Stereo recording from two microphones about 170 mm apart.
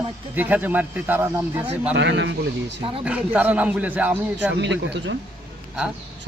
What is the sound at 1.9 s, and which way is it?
Speech, 90° right.